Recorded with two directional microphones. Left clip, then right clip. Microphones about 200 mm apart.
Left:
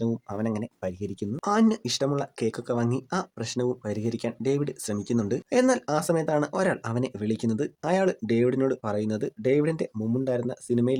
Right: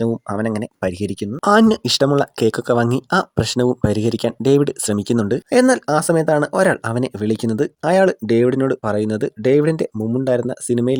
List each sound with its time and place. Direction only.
0.0 s speech: 40° right (ahead or behind)